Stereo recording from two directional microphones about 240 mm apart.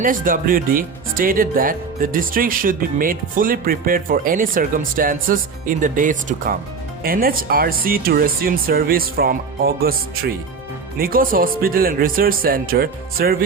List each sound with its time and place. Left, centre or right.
0.0 s speech: right